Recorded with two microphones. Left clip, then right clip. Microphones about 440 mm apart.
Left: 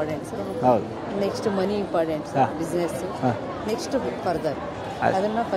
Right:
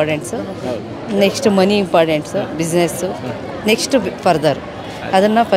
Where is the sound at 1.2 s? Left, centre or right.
Right.